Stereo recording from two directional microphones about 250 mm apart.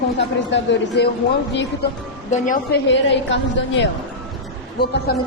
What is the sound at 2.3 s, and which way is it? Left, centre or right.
Speech, left.